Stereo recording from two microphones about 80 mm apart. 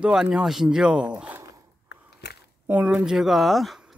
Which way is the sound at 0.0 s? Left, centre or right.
Centre.